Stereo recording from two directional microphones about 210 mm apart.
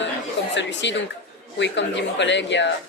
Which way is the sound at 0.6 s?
60° left (ahead or behind).